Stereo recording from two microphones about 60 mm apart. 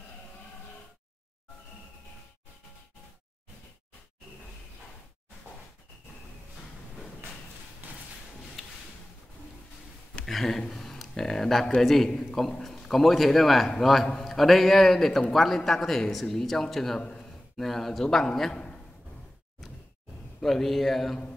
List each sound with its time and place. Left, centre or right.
7.8 s thump: right
8.6 s a sound: centre
10.2 s speech: centre
10.7 s a sound: centre
11.8 s a man's voice: centre
20.4 s a man's voice: centre